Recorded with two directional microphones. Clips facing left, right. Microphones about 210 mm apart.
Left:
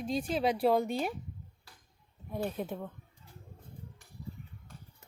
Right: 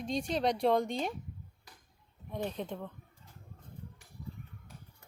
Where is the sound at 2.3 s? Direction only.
5° left (ahead or behind).